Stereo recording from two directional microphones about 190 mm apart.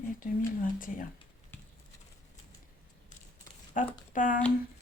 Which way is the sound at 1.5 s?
10° left (ahead or behind).